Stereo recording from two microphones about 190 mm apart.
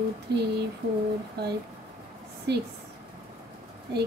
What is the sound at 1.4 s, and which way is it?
Speech, 60° right (ahead or behind).